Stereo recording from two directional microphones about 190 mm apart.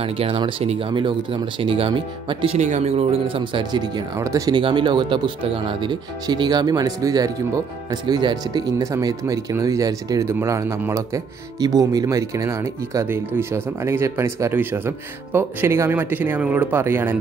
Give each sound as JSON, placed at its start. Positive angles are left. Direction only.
{"t": 0.0, "sound": "speech", "side_deg": -30}